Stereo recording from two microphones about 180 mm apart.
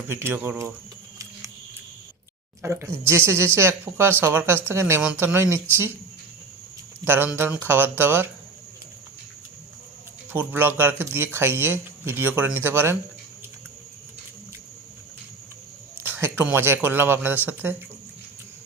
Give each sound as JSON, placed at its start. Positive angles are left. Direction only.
{"t": 0.1, "sound": "speech", "side_deg": -15}
{"t": 2.6, "sound": "speech", "side_deg": -15}
{"t": 7.0, "sound": "speech", "side_deg": -10}
{"t": 10.3, "sound": "speech", "side_deg": -10}
{"t": 16.0, "sound": "speech", "side_deg": -10}